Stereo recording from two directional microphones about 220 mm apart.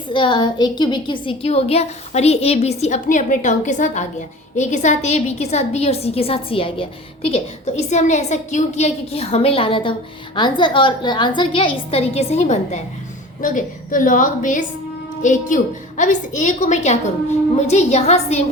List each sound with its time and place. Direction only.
0.1 s a woman's voice: 20° left (ahead or behind)